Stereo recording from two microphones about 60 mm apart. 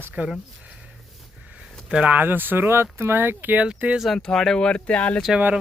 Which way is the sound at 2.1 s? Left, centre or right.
Right.